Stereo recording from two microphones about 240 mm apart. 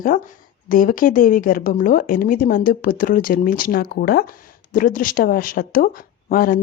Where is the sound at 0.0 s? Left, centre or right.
Left.